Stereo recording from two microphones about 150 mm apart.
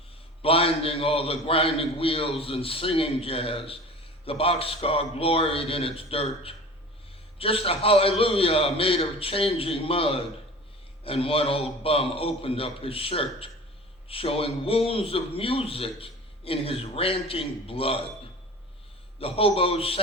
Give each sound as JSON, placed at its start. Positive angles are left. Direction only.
{"t": 0.4, "sound": "a man's voice", "side_deg": 40}
{"t": 19.2, "sound": "a man's voice", "side_deg": 40}